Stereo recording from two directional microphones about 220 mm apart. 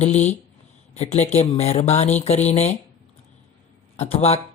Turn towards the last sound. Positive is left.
turn(degrees=30)  # may be behind; listen again after turning